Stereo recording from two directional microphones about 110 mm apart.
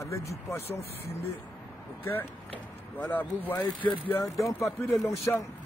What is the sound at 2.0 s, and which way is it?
Speech, 15° left (ahead or behind).